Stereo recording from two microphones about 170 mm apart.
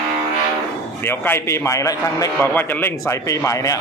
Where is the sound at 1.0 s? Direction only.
15° left (ahead or behind).